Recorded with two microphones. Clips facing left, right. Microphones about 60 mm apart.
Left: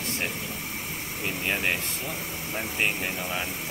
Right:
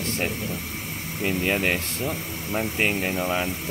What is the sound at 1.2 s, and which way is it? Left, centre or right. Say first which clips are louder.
Speech: right 5 dB; centre.